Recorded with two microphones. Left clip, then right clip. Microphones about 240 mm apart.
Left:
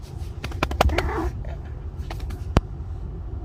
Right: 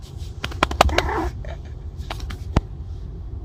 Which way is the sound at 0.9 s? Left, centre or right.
Right.